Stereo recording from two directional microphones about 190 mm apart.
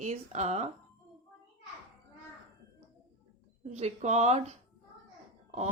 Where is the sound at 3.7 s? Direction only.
35° right (ahead or behind).